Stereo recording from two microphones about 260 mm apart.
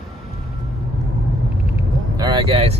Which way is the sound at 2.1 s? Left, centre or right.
Centre.